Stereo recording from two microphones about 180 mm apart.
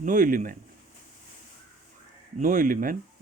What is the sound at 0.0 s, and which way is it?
Speech, 45° right (ahead or behind).